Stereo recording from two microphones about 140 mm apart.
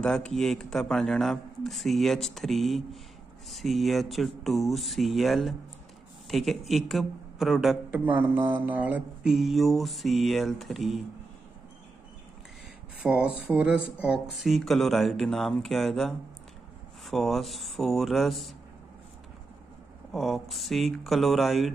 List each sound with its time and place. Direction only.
0.0 s mantra: 5° left (ahead or behind)
8.0 s mantra: 10° right (ahead or behind)
13.0 s speech: 5° right (ahead or behind)
14.0 s mantra: 5° right (ahead or behind)
20.1 s mantra: centre (ahead or behind)